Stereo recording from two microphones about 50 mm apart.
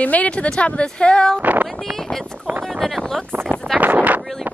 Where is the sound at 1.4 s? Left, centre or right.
Right.